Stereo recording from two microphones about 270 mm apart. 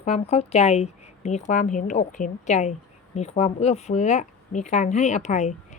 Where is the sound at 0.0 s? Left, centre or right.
Left.